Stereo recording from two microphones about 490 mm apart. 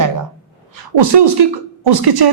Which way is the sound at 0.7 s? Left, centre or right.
Right.